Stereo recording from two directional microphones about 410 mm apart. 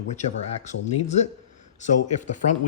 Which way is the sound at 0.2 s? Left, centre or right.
Centre.